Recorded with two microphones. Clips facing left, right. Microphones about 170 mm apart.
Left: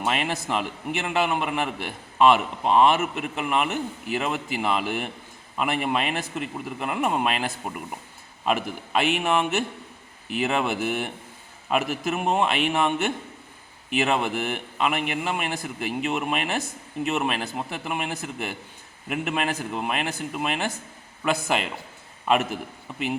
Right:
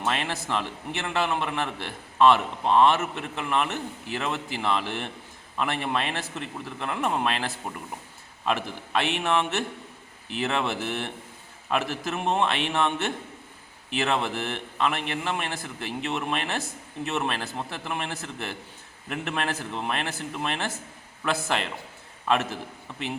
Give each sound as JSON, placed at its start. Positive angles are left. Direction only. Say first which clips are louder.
{"t": 0.0, "sound": "a man's voice", "louder": "left 2 dB", "side_deg": 15}